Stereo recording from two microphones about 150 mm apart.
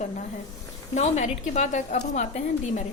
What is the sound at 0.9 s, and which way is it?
A woman's voice, 50° left (ahead or behind).